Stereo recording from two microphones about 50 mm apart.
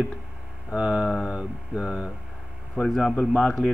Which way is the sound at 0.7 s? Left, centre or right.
Centre.